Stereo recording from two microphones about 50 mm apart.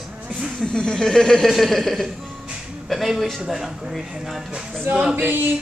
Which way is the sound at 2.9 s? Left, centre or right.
Centre.